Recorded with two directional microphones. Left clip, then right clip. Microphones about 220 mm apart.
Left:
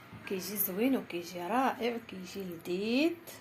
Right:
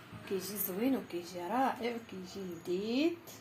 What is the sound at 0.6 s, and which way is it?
A woman's voice, 10° left (ahead or behind).